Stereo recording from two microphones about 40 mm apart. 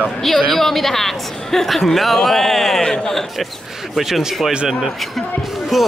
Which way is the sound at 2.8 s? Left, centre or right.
Centre.